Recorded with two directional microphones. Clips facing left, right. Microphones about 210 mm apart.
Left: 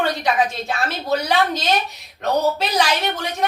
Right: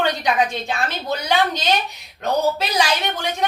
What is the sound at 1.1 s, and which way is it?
A woman's voice, centre (ahead or behind).